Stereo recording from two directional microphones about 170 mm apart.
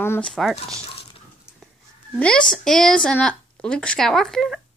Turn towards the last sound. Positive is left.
turn(degrees=0)  # may be behind; listen again after turning